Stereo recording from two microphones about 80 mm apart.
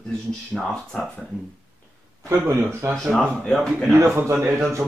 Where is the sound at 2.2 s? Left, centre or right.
Right.